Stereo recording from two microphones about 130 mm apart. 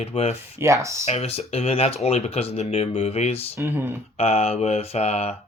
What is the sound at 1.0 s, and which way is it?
Speech, 50° left (ahead or behind).